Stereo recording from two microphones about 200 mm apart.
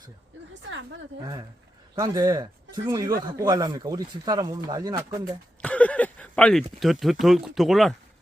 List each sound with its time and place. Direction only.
2.0 s speech: 20° right (ahead or behind)
5.6 s speech: 5° left (ahead or behind)